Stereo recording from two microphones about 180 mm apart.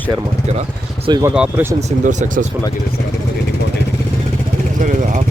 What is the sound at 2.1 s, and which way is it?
Speech, 45° right (ahead or behind).